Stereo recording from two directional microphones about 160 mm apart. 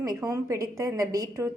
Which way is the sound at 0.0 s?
20° right (ahead or behind).